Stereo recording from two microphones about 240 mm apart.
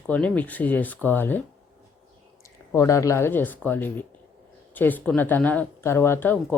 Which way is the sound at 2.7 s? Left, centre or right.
Centre.